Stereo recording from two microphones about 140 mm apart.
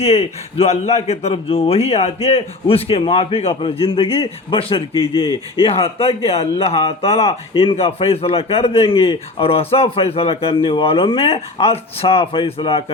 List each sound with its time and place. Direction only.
0.0 s speech: 45° left (ahead or behind)